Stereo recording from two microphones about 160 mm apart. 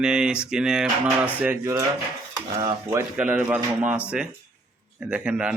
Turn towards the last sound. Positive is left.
turn(degrees=-5)  # may be behind; listen again after turning